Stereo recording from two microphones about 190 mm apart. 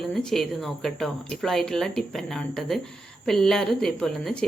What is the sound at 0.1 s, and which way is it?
Speech, 5° left (ahead or behind).